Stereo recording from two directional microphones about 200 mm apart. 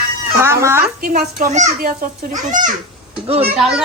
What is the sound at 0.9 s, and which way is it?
A child's voice, 45° right (ahead or behind).